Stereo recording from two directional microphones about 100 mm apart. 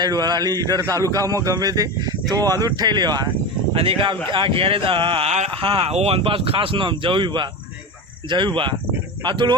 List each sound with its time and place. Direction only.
0.0 s speech: 40° right (ahead or behind)
3.8 s speech: 60° right (ahead or behind)